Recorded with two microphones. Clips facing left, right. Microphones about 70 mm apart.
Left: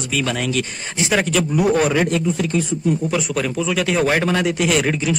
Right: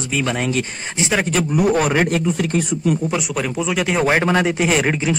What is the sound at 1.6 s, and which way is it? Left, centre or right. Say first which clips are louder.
Speech: even; right.